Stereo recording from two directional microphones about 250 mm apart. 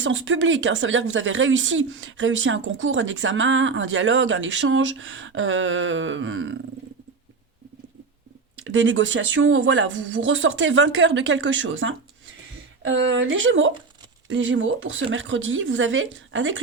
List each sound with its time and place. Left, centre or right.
0.0 s speech: right
8.7 s speech: right